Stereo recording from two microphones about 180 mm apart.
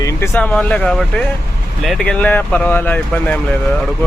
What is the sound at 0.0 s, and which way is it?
Speech, 15° left (ahead or behind).